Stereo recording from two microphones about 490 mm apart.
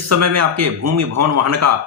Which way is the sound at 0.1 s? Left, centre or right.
Right.